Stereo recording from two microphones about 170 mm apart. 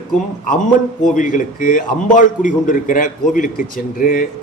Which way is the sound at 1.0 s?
50° left (ahead or behind).